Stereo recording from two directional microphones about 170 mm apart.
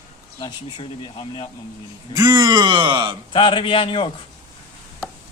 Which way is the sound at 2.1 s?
25° right (ahead or behind).